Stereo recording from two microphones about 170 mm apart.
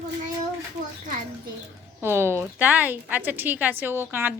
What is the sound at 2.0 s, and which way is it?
A woman's voice, 15° right (ahead or behind).